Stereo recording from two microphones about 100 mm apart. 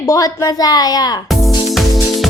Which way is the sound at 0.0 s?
35° left (ahead or behind).